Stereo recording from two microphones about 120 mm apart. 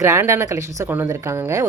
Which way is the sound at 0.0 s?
25° right (ahead or behind).